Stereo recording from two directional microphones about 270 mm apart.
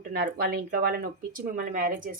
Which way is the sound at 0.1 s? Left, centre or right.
Right.